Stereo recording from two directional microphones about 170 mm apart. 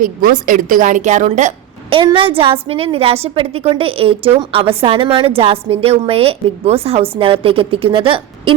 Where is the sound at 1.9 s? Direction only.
30° right (ahead or behind).